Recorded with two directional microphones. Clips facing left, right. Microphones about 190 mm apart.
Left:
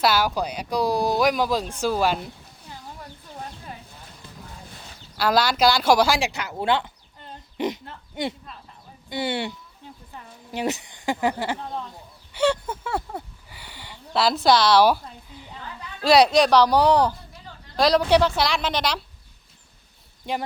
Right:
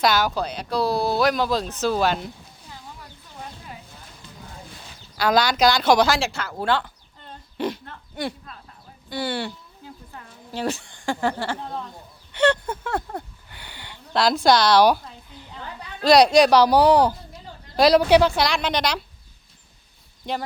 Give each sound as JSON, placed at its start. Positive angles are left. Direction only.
{"t": 0.0, "sound": "speech", "side_deg": 10}
{"t": 4.8, "sound": "speech", "side_deg": 0}
{"t": 10.5, "sound": "speech", "side_deg": 20}
{"t": 12.3, "sound": "a sound", "side_deg": 5}
{"t": 16.0, "sound": "a woman's voice", "side_deg": 5}
{"t": 20.3, "sound": "speech", "side_deg": 10}